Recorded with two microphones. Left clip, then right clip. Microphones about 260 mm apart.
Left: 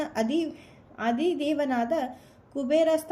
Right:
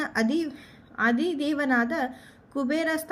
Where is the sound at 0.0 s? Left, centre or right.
Centre.